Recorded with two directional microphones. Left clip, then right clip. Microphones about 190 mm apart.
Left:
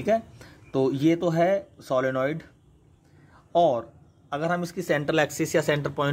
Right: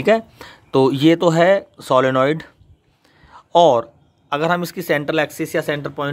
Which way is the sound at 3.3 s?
40° right (ahead or behind).